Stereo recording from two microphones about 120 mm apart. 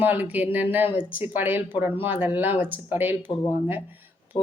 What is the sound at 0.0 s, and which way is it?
A woman's voice, 15° right (ahead or behind).